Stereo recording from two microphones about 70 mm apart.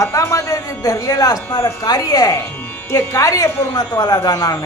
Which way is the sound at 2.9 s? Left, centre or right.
Left.